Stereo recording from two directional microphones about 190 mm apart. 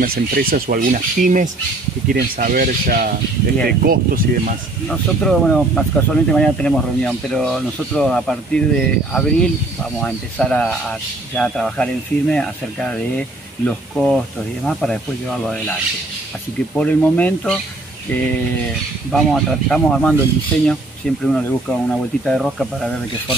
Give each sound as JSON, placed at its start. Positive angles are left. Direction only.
{"t": 0.0, "sound": "speech", "side_deg": -50}
{"t": 4.8, "sound": "speech", "side_deg": 5}
{"t": 16.7, "sound": "speech", "side_deg": 5}
{"t": 19.1, "sound": "speech", "side_deg": 0}